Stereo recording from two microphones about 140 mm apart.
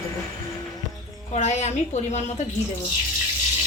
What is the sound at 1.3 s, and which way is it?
A woman's voice, 55° left (ahead or behind).